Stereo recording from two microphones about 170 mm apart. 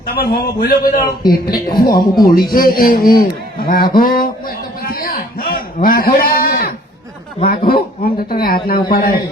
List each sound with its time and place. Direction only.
0.2 s speech: 65° left (ahead or behind)
3.6 s a sound: 60° left (ahead or behind)
7.4 s a man's voice: 60° left (ahead or behind)